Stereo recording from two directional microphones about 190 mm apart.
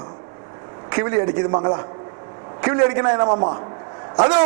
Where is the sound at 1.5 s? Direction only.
25° right (ahead or behind).